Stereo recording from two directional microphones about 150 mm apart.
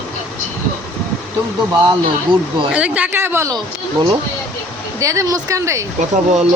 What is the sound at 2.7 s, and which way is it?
Speech, 10° right (ahead or behind).